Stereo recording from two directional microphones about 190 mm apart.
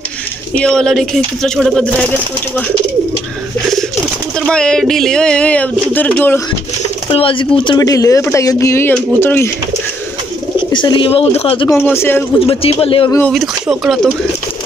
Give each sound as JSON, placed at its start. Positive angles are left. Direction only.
{"t": 0.6, "sound": "speech", "side_deg": 5}
{"t": 4.4, "sound": "speech", "side_deg": 5}
{"t": 7.1, "sound": "speech", "side_deg": 30}
{"t": 10.7, "sound": "speech", "side_deg": 25}
{"t": 11.7, "sound": "speech", "side_deg": 10}
{"t": 12.4, "sound": "speech", "side_deg": 30}
{"t": 13.3, "sound": "speech", "side_deg": 0}